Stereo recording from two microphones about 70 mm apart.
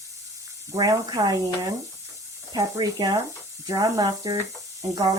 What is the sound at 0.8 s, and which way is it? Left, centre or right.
Speech, right.